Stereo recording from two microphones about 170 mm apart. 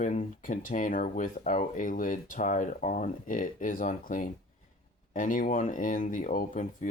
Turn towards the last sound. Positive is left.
turn(degrees=50)  # may be behind; listen again after turning